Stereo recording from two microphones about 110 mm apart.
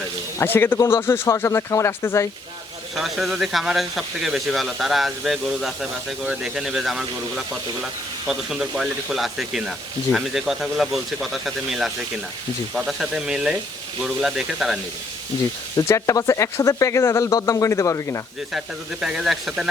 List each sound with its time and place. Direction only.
0.3 s speech: 20° left (ahead or behind)
2.9 s speech: centre (ahead or behind)
15.9 s speech: 30° left (ahead or behind)
19.0 s speech: 5° right (ahead or behind)